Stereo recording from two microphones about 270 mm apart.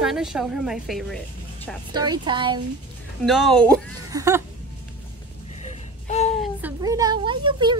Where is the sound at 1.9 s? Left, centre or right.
Centre.